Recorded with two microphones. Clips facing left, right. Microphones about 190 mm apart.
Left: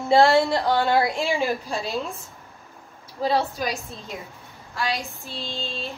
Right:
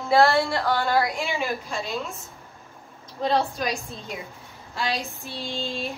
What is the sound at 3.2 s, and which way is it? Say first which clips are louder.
Speech: even; 5° left (ahead or behind).